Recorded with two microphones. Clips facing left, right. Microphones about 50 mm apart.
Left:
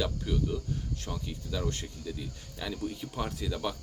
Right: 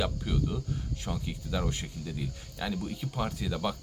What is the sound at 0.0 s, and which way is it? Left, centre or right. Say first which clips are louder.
Speech: even; centre.